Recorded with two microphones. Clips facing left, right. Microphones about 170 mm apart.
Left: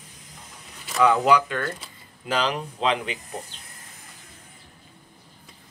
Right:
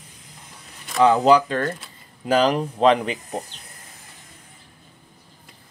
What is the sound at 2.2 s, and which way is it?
Speech, 45° right (ahead or behind).